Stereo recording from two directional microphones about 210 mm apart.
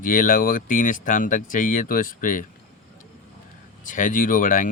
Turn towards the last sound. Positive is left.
turn(degrees=40)  # may be behind; listen again after turning